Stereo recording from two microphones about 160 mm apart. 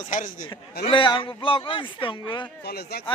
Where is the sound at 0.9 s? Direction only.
30° left (ahead or behind).